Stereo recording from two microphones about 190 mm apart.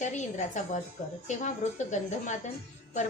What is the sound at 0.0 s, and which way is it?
A woman's voice, 40° left (ahead or behind).